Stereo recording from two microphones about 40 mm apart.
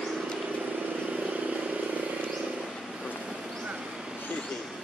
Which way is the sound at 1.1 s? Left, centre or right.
Right.